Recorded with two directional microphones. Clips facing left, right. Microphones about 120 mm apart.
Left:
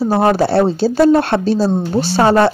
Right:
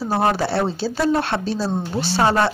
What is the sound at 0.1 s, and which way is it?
Speech, 45° left (ahead or behind).